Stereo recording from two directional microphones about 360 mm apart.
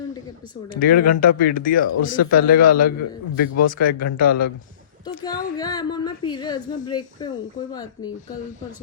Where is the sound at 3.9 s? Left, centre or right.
Left.